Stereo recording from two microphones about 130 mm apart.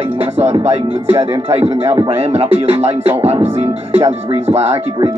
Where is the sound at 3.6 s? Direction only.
55° right (ahead or behind).